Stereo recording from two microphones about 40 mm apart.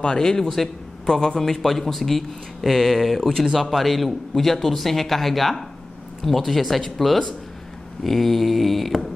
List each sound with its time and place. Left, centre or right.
0.0 s a man's voice: centre